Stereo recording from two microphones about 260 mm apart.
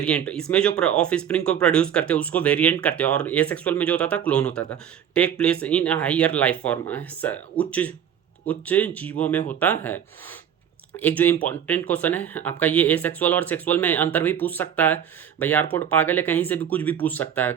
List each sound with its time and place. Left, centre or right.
0.0 s speech: centre